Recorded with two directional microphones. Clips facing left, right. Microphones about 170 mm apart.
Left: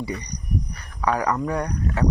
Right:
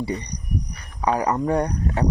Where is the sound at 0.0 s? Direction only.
25° right (ahead or behind).